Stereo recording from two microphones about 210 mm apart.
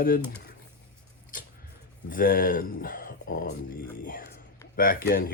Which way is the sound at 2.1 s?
40° left (ahead or behind).